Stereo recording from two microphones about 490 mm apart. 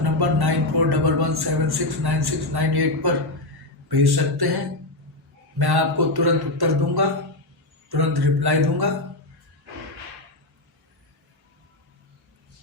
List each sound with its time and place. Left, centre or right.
0.0 s a sound: right
3.8 s speech: right
5.5 s speech: right